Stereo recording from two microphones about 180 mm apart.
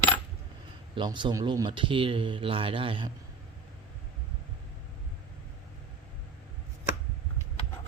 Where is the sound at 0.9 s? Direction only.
25° right (ahead or behind).